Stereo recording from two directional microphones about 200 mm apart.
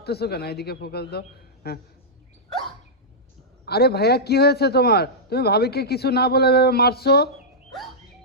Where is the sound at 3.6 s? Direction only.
55° left (ahead or behind).